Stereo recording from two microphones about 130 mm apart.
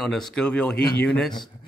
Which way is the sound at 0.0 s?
5° left (ahead or behind).